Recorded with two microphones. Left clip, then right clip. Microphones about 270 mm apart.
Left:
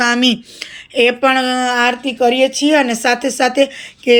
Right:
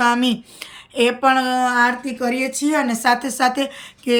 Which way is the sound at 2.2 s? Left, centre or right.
Left.